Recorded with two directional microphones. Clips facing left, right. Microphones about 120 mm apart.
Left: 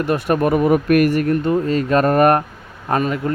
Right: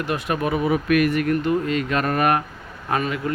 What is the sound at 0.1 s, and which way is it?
Speech, 45° left (ahead or behind).